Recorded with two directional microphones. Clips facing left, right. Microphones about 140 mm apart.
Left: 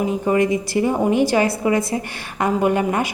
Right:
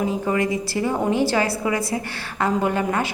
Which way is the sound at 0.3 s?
20° left (ahead or behind).